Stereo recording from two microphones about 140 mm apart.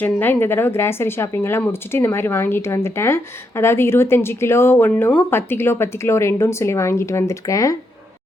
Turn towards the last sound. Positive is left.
turn(degrees=25)  # may be behind; listen again after turning